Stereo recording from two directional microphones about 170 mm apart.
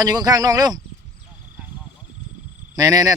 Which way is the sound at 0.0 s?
20° right (ahead or behind).